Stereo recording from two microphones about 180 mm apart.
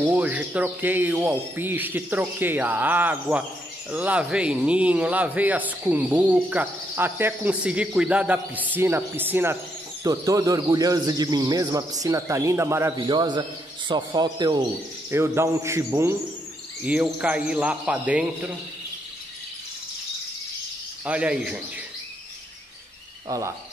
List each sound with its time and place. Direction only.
0.1 s a man's voice: 10° right (ahead or behind)
21.0 s speech: 5° right (ahead or behind)
23.2 s frog: 20° right (ahead or behind)